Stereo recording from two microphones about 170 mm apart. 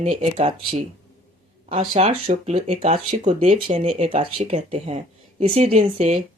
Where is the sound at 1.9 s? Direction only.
35° right (ahead or behind).